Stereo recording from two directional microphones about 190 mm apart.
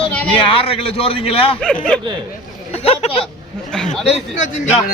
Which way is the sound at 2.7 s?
35° left (ahead or behind).